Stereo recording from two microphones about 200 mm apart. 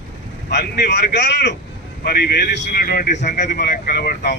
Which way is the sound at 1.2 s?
60° left (ahead or behind).